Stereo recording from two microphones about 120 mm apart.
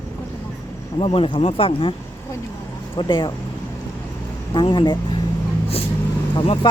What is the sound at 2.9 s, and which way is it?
Speech, 40° left (ahead or behind).